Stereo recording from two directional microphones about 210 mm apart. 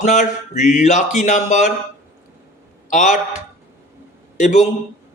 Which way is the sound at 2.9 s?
35° left (ahead or behind).